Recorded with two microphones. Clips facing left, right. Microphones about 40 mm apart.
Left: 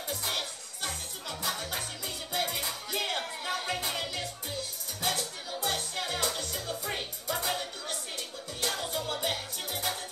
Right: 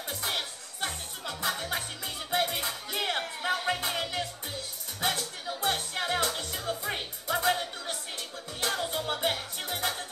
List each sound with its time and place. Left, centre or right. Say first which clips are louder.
0.1 s music: right 1 dB; right
5.0 s music: right 2 dB; right
8.5 s music: right 2 dB; right